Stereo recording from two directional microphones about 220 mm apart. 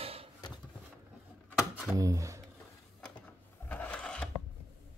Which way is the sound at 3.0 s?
5° left (ahead or behind).